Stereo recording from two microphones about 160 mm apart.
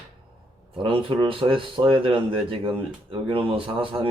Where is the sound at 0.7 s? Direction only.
35° right (ahead or behind).